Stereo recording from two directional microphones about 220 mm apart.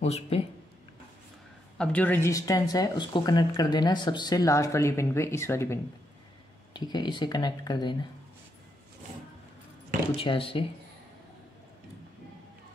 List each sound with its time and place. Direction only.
0.0 s speech: 30° left (ahead or behind)
1.8 s speech: 5° left (ahead or behind)
10.1 s speech: 25° left (ahead or behind)